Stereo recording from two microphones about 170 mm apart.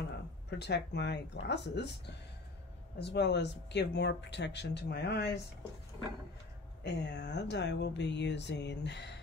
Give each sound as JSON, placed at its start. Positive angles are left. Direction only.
{"t": 0.5, "sound": "speech", "side_deg": 80}
{"t": 3.0, "sound": "speech", "side_deg": 90}
{"t": 6.8, "sound": "speech", "side_deg": 90}